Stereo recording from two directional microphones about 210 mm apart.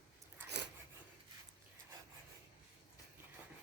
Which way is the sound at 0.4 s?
55° right (ahead or behind).